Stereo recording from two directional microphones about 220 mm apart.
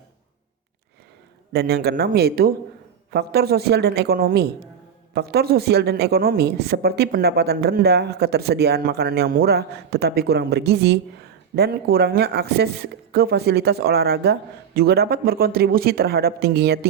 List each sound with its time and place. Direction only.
1.5 s a woman's voice: 50° right (ahead or behind)